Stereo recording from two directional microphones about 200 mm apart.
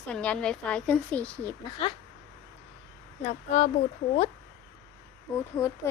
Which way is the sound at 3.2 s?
35° left (ahead or behind).